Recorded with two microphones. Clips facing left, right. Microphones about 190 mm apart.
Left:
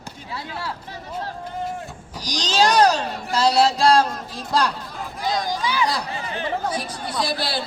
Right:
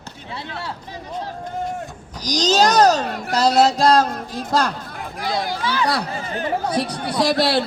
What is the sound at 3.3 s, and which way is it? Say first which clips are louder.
Music: right 2 dB; 40° right (ahead or behind).